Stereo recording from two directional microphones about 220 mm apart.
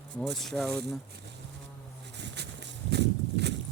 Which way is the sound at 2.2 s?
50° right (ahead or behind).